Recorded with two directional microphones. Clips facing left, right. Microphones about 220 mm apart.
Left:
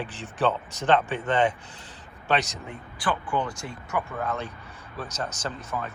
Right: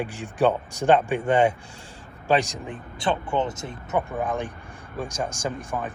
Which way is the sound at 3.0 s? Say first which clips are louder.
Right 3 dB; 25° right (ahead or behind).